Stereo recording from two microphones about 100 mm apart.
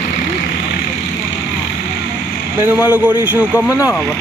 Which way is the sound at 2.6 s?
20° right (ahead or behind).